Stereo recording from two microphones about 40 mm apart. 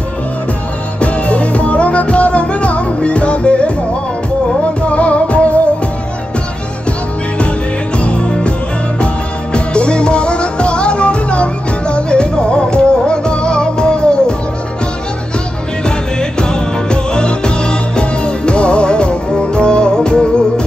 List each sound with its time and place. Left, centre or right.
1.0 s music: left
4.8 s music: left
8.0 s music: left
16.2 s music: left